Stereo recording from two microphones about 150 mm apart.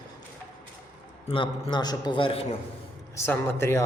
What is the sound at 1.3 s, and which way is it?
A man's voice, 35° left (ahead or behind).